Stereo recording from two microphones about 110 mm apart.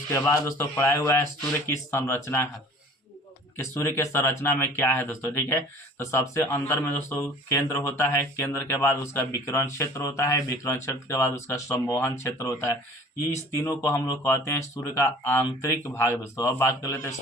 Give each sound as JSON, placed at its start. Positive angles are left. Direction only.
{"t": 0.1, "sound": "speech", "side_deg": 25}
{"t": 3.8, "sound": "speech", "side_deg": 20}